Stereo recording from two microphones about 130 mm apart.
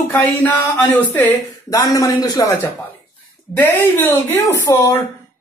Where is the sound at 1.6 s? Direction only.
25° left (ahead or behind).